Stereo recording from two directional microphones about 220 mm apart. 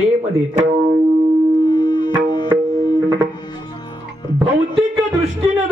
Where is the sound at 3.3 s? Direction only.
20° left (ahead or behind).